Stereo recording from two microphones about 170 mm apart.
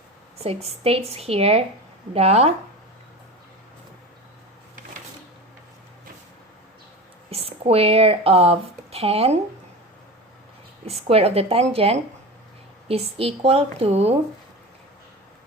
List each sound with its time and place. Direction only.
0.4 s a woman's voice: 35° right (ahead or behind)
7.3 s speech: 35° right (ahead or behind)
10.8 s a woman's voice: 35° right (ahead or behind)